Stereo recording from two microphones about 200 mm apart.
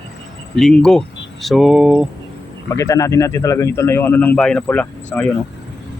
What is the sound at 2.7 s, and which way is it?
A man's voice, 15° left (ahead or behind).